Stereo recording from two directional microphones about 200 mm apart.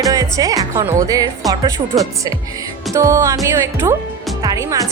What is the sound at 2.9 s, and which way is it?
Speech, 15° right (ahead or behind).